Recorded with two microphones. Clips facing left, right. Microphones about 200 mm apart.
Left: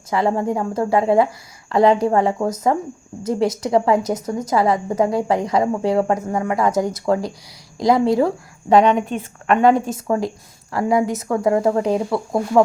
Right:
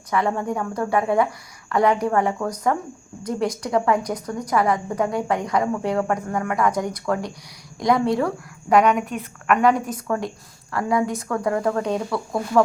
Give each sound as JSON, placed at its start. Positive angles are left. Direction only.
{"t": 0.1, "sound": "a woman's voice", "side_deg": 25}